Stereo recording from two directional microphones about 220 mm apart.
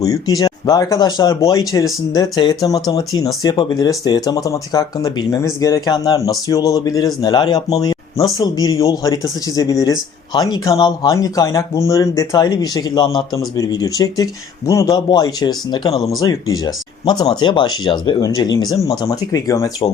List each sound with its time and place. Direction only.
0.0 s speech: 15° left (ahead or behind)